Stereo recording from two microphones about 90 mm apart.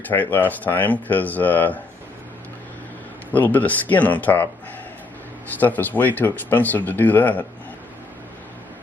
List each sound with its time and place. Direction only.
0.1 s speech: 20° left (ahead or behind)
3.3 s speech: 20° left (ahead or behind)
5.5 s speech: 20° left (ahead or behind)